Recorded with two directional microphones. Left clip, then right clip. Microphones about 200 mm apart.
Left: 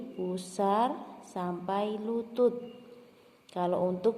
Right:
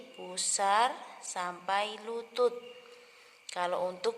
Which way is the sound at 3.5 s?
15° right (ahead or behind).